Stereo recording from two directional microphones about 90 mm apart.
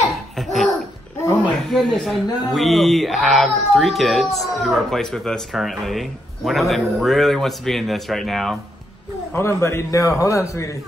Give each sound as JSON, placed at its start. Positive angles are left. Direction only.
{"t": 0.1, "sound": "laughter", "side_deg": 0}
{"t": 1.6, "sound": "a child's voice", "side_deg": 5}
{"t": 9.3, "sound": "a man's voice", "side_deg": 30}